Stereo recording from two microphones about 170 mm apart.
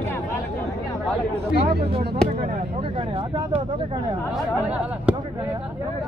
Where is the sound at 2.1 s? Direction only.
35° right (ahead or behind).